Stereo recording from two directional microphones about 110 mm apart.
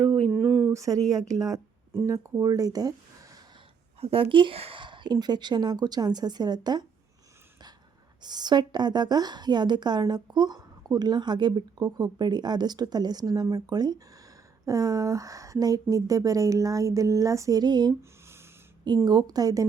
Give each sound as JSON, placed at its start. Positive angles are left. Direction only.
{"t": 0.3, "sound": "a sound", "side_deg": -15}
{"t": 0.7, "sound": "a woman's voice", "side_deg": -30}
{"t": 4.0, "sound": "a woman's voice", "side_deg": -55}
{"t": 8.2, "sound": "a woman's voice", "side_deg": -40}
{"t": 19.0, "sound": "a woman's voice", "side_deg": -35}